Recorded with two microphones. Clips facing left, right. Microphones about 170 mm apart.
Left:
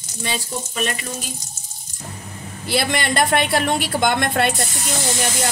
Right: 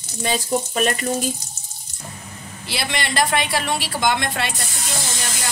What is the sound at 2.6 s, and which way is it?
A woman's voice, 50° left (ahead or behind).